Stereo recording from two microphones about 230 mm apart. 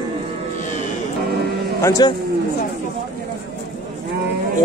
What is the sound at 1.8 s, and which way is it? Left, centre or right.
Speech, centre.